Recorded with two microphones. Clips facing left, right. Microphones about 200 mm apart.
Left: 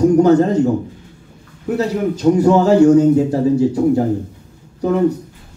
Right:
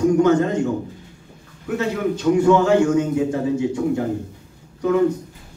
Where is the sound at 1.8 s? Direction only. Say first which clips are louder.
Left 3 dB; 35° left (ahead or behind).